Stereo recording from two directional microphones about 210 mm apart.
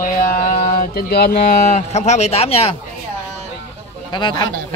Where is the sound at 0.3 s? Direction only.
40° left (ahead or behind).